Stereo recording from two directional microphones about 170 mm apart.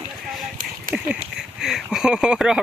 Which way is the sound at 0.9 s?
50° right (ahead or behind).